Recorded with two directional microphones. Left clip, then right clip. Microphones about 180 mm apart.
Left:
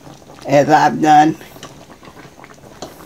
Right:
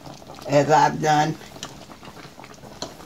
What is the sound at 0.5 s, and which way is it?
Speech, 60° left (ahead or behind).